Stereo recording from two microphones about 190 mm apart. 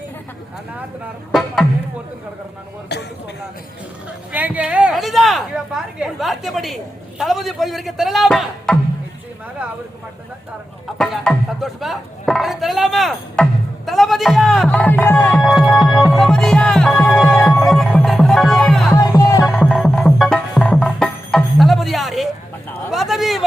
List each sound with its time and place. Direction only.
1.3 s speech: centre (ahead or behind)
2.9 s a man's voice: 60° left (ahead or behind)
4.3 s speech: 10° right (ahead or behind)
10.9 s speech: 5° left (ahead or behind)
15.4 s music: centre (ahead or behind)
19.1 s music: 20° left (ahead or behind)
19.5 s music: centre (ahead or behind)
22.9 s a sound: centre (ahead or behind)